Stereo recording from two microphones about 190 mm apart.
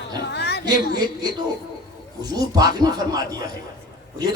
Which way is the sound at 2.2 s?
20° right (ahead or behind).